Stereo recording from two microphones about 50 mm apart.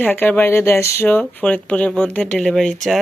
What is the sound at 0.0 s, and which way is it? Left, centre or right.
Speech, left.